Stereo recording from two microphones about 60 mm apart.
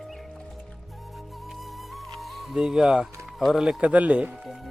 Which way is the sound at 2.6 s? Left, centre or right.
Centre.